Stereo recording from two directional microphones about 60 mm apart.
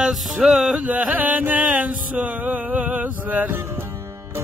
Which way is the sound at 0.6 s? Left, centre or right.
Centre.